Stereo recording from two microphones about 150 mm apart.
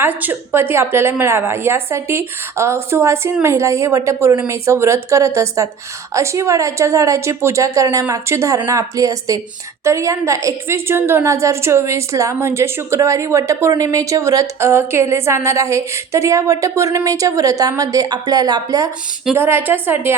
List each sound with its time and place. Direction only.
0.0 s a woman's voice: 15° right (ahead or behind)
19.4 s a woman's voice: 15° right (ahead or behind)